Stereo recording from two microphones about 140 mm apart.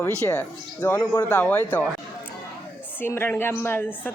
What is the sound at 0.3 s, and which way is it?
Speech, 10° left (ahead or behind).